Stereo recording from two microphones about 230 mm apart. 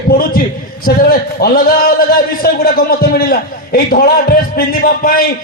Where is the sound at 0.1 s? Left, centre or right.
Left.